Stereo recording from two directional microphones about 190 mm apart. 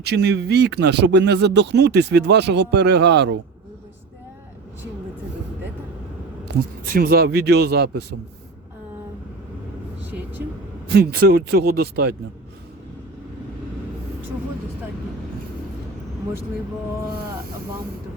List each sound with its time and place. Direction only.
0.0 s speech: 60° right (ahead or behind)
6.4 s speech: 50° right (ahead or behind)
10.9 s speech: 55° right (ahead or behind)